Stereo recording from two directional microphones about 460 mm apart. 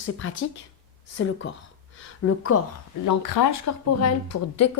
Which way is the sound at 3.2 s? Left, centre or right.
Left.